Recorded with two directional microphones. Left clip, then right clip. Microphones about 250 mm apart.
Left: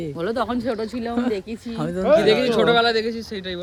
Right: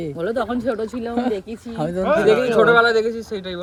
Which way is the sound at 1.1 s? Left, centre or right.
Centre.